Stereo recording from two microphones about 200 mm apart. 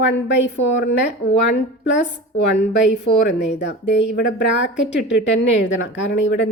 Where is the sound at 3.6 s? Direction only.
60° left (ahead or behind).